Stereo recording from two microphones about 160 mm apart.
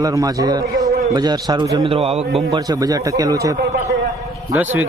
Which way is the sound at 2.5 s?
25° right (ahead or behind).